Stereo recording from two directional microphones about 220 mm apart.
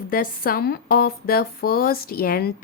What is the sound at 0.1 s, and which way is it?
Speech, 40° left (ahead or behind).